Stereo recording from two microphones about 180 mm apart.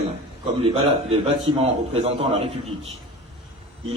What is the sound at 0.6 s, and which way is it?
A man's voice, 30° right (ahead or behind).